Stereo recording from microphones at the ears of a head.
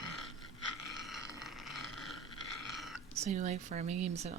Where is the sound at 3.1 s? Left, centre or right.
Right.